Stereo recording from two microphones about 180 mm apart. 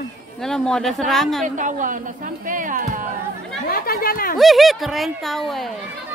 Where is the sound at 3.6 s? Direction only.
55° left (ahead or behind).